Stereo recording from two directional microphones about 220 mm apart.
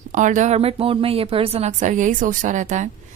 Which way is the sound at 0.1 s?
35° right (ahead or behind).